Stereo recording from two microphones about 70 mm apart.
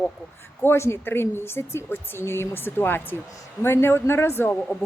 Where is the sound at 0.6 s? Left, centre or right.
Left.